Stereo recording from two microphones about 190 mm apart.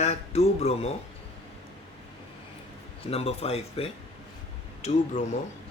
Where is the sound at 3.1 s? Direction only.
30° left (ahead or behind).